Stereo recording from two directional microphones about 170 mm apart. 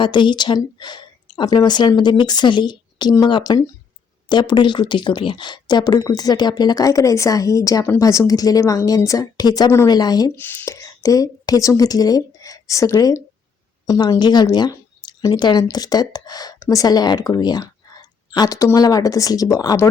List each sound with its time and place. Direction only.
0.0 s speech: 25° left (ahead or behind)
10.3 s a woman's voice: 10° left (ahead or behind)